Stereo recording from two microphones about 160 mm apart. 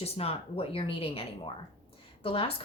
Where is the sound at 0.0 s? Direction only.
40° left (ahead or behind).